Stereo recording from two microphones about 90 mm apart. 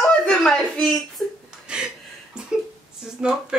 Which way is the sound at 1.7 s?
10° right (ahead or behind).